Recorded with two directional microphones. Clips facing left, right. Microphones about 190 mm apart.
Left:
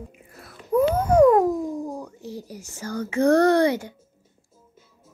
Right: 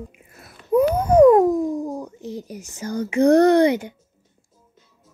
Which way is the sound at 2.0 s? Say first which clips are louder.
Right 4 dB; 20° right (ahead or behind).